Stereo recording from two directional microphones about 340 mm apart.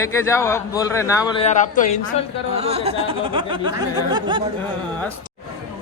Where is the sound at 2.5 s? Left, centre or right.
Centre.